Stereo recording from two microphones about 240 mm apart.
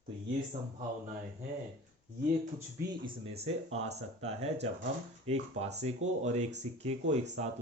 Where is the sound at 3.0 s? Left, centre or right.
Right.